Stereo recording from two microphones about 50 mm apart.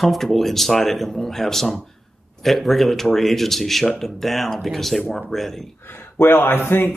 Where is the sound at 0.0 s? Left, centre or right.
Centre.